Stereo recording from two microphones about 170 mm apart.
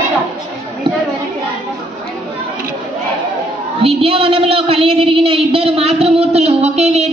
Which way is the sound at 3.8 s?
35° right (ahead or behind).